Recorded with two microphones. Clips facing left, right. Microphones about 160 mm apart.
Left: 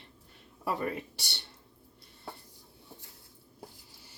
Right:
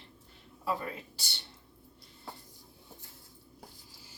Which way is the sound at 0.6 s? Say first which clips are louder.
Left 2 dB; 70° left (ahead or behind).